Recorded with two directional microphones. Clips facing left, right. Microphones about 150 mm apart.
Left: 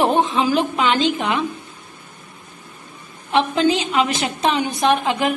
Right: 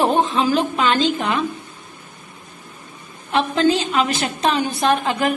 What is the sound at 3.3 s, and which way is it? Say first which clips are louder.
A woman's voice: even; 15° left (ahead or behind).